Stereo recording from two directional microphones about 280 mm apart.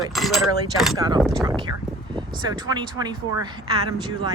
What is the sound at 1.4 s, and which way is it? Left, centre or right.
Speech, centre.